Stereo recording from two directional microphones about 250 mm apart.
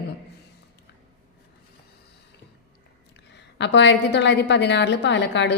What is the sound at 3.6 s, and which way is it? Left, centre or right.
A woman's voice, left.